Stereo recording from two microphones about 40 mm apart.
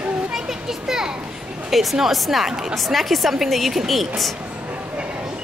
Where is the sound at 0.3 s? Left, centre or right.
Centre.